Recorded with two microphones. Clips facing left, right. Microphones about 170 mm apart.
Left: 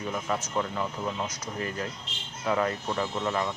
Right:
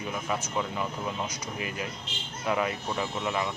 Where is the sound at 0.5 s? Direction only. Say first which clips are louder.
Left 1 dB; 10° right (ahead or behind).